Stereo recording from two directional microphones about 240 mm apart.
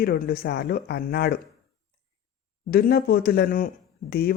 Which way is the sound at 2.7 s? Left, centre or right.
Left.